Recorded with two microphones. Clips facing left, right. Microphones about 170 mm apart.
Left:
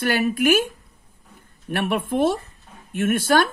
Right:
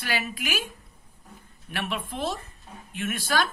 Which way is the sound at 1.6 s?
55° left (ahead or behind).